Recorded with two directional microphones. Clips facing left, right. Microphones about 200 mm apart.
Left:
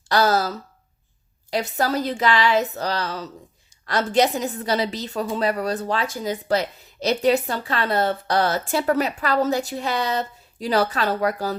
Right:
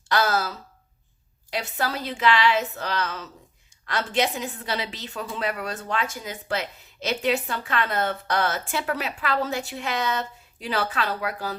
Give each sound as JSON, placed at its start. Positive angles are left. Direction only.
{"t": 0.1, "sound": "a woman's voice", "side_deg": 35}